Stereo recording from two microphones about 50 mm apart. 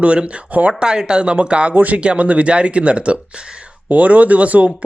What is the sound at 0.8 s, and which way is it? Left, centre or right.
Speech, centre.